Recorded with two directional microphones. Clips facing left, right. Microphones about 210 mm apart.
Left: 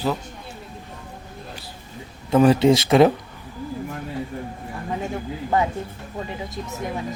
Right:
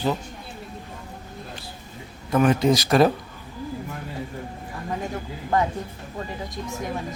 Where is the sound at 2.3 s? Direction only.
30° left (ahead or behind).